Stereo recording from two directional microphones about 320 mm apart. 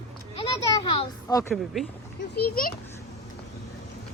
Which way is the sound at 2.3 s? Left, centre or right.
Left.